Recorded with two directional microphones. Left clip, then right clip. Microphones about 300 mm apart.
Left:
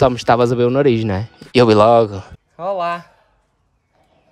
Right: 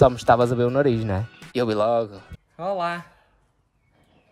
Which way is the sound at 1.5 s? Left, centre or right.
Left.